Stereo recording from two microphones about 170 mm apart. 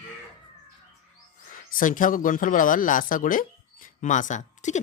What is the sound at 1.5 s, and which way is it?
Speech, 50° left (ahead or behind).